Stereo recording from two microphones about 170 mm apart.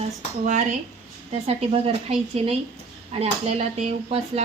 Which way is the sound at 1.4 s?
35° right (ahead or behind).